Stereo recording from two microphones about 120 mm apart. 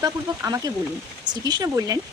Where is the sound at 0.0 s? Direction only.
30° right (ahead or behind).